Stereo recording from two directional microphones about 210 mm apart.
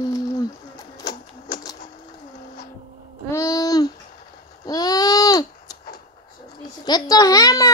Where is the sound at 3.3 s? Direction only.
15° left (ahead or behind).